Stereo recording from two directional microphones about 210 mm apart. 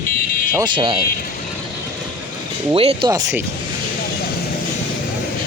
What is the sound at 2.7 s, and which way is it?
Speech, 30° right (ahead or behind).